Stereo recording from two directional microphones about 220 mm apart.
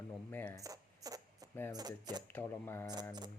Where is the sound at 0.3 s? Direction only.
10° left (ahead or behind).